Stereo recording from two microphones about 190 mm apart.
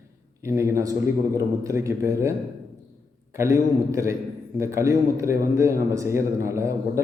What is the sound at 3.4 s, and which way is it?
Speech, 15° right (ahead or behind).